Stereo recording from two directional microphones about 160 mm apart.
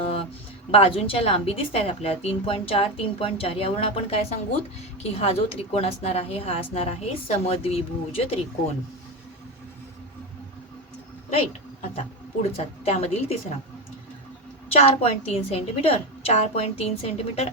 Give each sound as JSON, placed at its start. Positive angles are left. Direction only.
{"t": 0.0, "sound": "a sound", "side_deg": 35}
{"t": 0.7, "sound": "speech", "side_deg": 35}
{"t": 11.9, "sound": "speech", "side_deg": 40}
{"t": 14.7, "sound": "speech", "side_deg": 40}